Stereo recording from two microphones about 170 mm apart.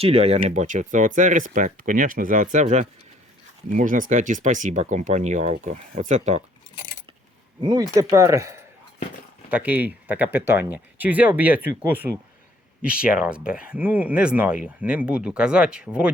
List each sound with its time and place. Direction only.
0.0 s speech: 35° right (ahead or behind)
7.6 s speech: 25° right (ahead or behind); by 16.1 s 5° right (ahead or behind)